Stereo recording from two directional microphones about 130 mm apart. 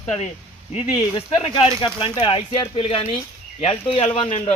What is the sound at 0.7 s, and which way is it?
Speech, 45° left (ahead or behind).